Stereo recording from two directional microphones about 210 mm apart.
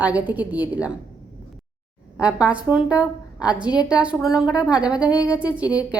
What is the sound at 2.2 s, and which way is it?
Speech, 5° right (ahead or behind).